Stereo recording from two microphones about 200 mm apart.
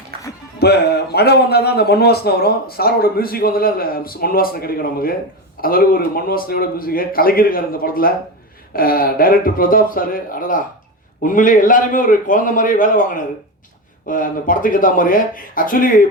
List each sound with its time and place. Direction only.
0.6 s a man's voice: 55° left (ahead or behind)